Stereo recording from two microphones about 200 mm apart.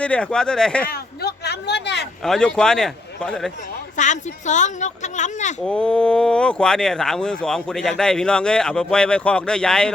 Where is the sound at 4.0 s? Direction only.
35° left (ahead or behind).